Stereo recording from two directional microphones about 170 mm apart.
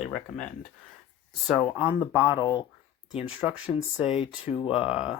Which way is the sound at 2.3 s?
25° left (ahead or behind).